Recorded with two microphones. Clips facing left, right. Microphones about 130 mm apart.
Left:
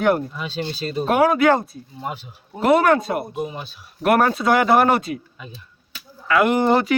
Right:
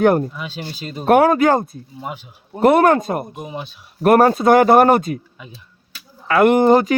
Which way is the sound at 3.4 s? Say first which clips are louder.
Even; 20° right (ahead or behind).